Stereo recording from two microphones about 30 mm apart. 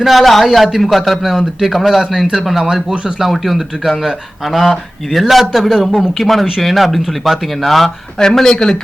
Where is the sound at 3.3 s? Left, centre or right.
Centre.